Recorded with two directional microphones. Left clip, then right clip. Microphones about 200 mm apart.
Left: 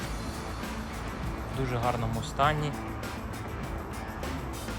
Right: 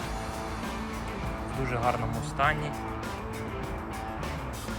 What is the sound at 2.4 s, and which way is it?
Speech, 15° left (ahead or behind).